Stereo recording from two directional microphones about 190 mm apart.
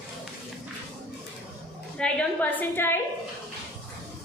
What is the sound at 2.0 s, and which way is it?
Speech, 5° left (ahead or behind).